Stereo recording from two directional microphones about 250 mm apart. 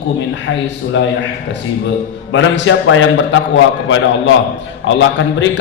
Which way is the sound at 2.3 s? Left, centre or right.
Left.